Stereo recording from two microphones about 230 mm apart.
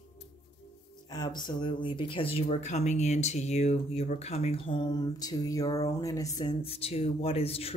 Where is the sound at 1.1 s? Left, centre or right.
Centre.